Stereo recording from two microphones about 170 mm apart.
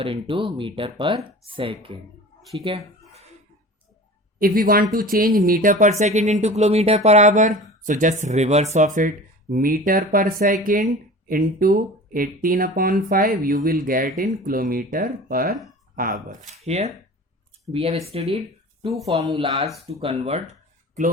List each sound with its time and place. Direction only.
0.0 s speech: 30° right (ahead or behind)
2.6 s a sound: 35° right (ahead or behind)
4.4 s speech: 55° right (ahead or behind)
16.5 s speech: 40° right (ahead or behind)
19.2 s speech: 20° right (ahead or behind)
19.9 s speech: 40° right (ahead or behind)